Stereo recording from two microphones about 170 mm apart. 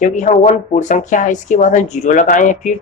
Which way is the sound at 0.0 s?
45° left (ahead or behind).